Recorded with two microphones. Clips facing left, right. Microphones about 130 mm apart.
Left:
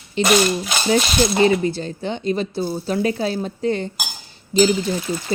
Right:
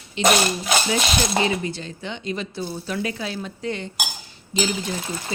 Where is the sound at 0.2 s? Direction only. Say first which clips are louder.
Even; 40° left (ahead or behind).